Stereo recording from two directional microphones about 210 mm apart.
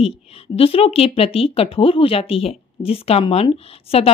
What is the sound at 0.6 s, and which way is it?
Speech, 25° left (ahead or behind).